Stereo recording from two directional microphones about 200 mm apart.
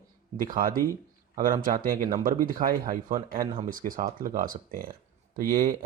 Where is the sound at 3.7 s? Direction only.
45° right (ahead or behind).